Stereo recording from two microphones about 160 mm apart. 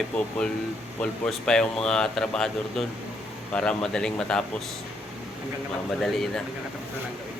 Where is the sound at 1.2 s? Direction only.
5° left (ahead or behind).